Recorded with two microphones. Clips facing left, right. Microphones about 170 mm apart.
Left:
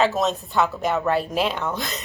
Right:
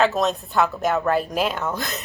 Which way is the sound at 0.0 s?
Centre (ahead or behind).